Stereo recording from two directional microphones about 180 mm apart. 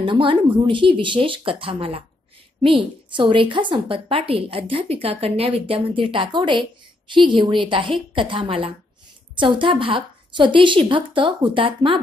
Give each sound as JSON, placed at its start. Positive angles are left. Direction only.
{"t": 0.0, "sound": "a woman's voice", "side_deg": -30}